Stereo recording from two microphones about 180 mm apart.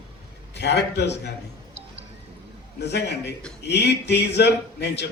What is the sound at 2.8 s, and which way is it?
A man's voice, 70° left (ahead or behind).